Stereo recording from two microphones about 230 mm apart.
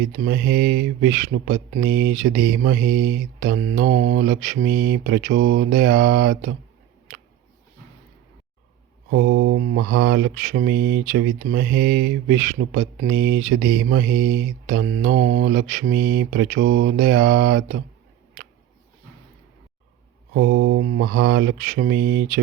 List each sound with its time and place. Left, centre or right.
0.0 s speech: right
9.0 s mantra: right
10.0 s speech: right
20.3 s mantra: right
21.0 s speech: right
21.2 s speech: right